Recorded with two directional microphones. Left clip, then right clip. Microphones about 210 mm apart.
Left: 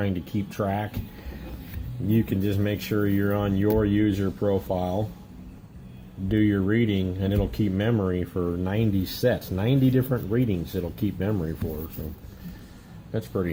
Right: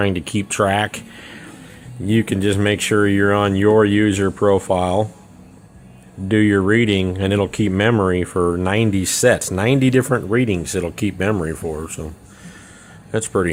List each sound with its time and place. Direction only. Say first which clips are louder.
0.0 s speech: right 10 dB; 45° right (ahead or behind)
2.1 s speech: right 9 dB; 35° right (ahead or behind)
6.2 s speech: right 8 dB; 40° right (ahead or behind)
13.1 s speech: right 10 dB; 40° right (ahead or behind)